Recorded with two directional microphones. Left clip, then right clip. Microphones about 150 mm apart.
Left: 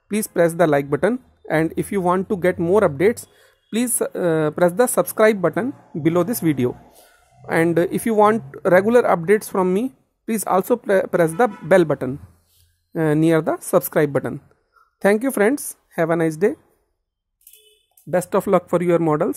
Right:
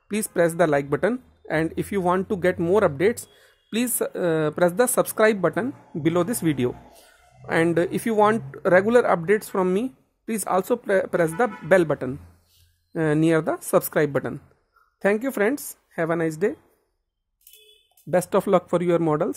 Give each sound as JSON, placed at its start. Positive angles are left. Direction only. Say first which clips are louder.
{"t": 0.1, "sound": "a woman's voice", "louder": "left 3 dB", "side_deg": 15}
{"t": 18.1, "sound": "speech", "louder": "left 2 dB", "side_deg": 5}